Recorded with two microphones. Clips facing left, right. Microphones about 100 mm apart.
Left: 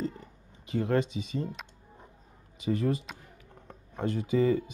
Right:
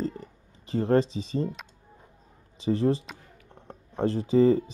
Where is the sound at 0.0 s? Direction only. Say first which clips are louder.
Right 3 dB; 35° right (ahead or behind).